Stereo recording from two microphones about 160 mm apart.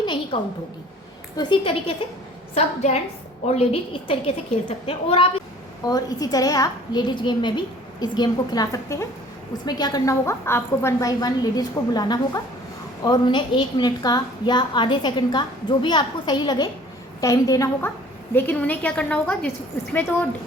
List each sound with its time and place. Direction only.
0.0 s a woman's voice: 30° left (ahead or behind)
1.4 s a woman's voice: 30° left (ahead or behind)
2.6 s a woman's voice: 40° left (ahead or behind)
5.8 s a woman's voice: 25° left (ahead or behind)